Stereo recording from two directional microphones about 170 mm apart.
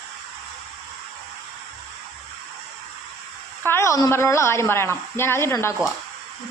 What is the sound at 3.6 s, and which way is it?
A woman's voice, 15° left (ahead or behind).